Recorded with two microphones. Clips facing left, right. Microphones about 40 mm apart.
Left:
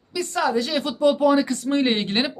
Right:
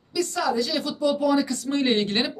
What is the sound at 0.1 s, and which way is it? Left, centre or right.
Speech, left.